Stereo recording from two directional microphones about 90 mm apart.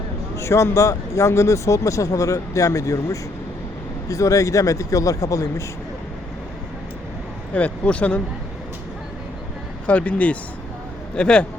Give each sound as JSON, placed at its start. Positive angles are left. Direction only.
{"t": 0.3, "sound": "speech", "side_deg": 30}
{"t": 7.5, "sound": "speech", "side_deg": 15}
{"t": 9.8, "sound": "speech", "side_deg": 15}